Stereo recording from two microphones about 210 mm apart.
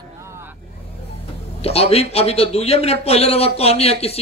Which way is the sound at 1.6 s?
30° left (ahead or behind).